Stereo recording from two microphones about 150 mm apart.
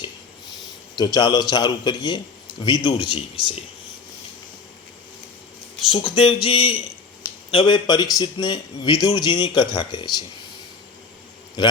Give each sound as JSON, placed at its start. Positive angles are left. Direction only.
{"t": 0.9, "sound": "a man's voice", "side_deg": 30}
{"t": 5.9, "sound": "a man's voice", "side_deg": 35}